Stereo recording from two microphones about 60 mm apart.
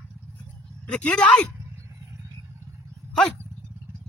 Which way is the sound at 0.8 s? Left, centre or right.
Centre.